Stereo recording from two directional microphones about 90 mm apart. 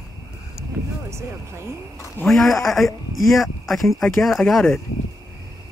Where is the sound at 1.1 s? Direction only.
30° right (ahead or behind).